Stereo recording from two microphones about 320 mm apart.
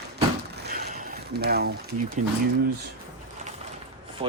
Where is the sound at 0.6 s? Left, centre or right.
Right.